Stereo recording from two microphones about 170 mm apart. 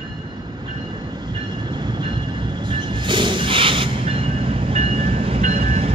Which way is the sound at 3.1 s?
30° right (ahead or behind).